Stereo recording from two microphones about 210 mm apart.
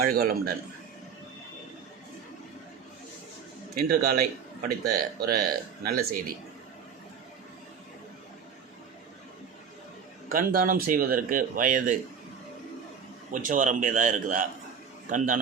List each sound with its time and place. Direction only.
0.0 s speech: 45° right (ahead or behind)
3.8 s speech: 45° right (ahead or behind)
10.2 s speech: 40° right (ahead or behind)
13.3 s speech: 40° right (ahead or behind)